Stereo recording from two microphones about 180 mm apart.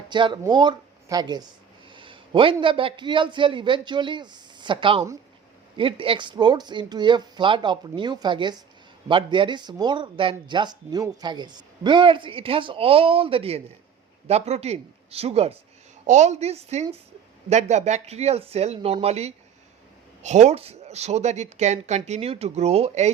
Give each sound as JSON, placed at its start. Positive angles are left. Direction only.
{"t": 0.1, "sound": "a man's voice", "side_deg": -25}